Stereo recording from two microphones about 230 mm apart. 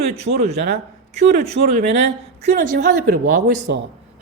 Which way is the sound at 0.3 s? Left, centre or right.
Right.